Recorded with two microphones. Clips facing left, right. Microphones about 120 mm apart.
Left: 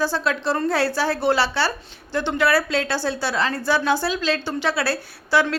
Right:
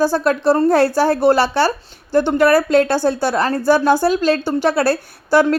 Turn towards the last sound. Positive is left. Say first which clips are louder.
# right 6 dB
turn(degrees=-45)  # may be behind; listen again after turning